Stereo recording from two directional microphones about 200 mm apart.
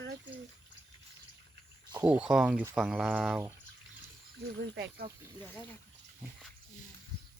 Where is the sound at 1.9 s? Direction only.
10° right (ahead or behind).